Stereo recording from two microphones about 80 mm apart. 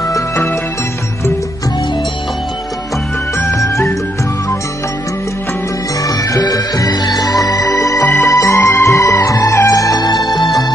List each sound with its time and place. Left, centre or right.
3.3 s music: left
6.5 s music: left